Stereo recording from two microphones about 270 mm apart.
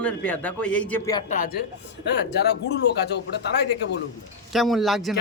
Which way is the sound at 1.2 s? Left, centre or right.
Left.